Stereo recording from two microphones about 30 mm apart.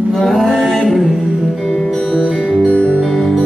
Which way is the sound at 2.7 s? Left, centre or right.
Left.